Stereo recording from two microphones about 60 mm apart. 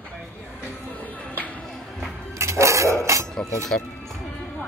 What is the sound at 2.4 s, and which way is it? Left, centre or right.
Dog, right.